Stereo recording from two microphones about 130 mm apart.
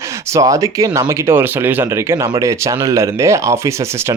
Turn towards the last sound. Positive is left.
turn(degrees=-20)  # may be behind; listen again after turning